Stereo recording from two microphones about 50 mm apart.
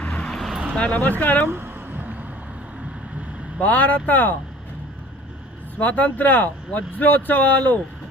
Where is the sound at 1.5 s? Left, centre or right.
Right.